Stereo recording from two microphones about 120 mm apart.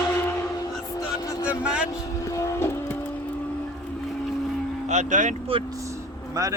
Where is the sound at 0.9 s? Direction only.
30° left (ahead or behind).